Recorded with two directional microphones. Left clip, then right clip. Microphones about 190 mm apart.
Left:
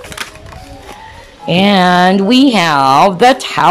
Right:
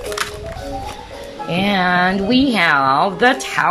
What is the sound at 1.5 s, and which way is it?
Speech, 15° left (ahead or behind).